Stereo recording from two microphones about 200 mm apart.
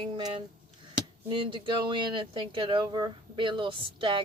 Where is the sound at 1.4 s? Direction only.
25° right (ahead or behind).